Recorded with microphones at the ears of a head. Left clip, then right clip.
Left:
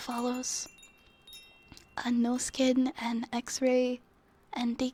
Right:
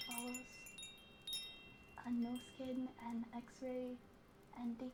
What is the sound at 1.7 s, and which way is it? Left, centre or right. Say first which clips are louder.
A woman's voice: left 15 dB; left.